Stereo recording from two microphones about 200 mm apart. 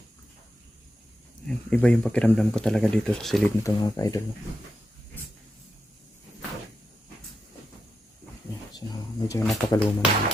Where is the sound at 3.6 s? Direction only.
15° left (ahead or behind).